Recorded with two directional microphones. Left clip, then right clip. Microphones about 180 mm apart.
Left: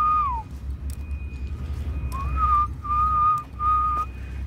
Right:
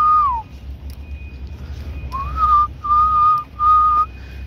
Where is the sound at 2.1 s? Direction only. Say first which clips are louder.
Right 7 dB; centre (ahead or behind).